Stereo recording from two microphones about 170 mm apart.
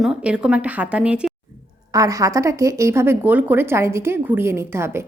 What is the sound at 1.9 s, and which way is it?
Speech, 20° right (ahead or behind).